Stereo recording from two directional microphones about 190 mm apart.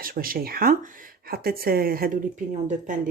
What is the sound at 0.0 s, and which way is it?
Speech, 50° right (ahead or behind).